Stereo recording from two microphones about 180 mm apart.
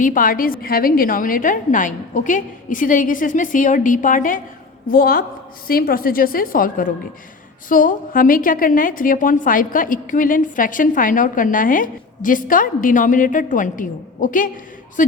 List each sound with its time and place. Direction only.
0.0 s a woman's voice: 50° left (ahead or behind)